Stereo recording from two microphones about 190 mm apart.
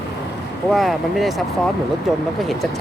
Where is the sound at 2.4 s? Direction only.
Centre (ahead or behind).